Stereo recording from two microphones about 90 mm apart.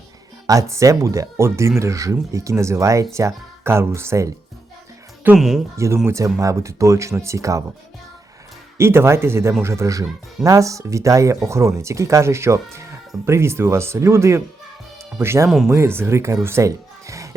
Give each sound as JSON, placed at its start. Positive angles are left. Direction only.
{"t": 0.4, "sound": "speech", "side_deg": -35}
{"t": 5.7, "sound": "speech", "side_deg": -35}
{"t": 8.8, "sound": "speech", "side_deg": -30}
{"t": 15.4, "sound": "speech", "side_deg": -5}
{"t": 15.7, "sound": "speech", "side_deg": -25}